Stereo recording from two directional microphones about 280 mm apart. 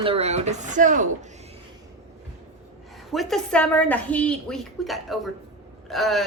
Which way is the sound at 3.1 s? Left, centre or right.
Centre.